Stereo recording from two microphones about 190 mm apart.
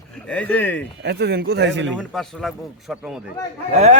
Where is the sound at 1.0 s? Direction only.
60° right (ahead or behind).